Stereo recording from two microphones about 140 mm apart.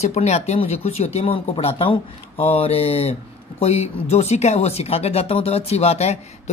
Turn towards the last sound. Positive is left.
turn(degrees=50)  # may be behind; listen again after turning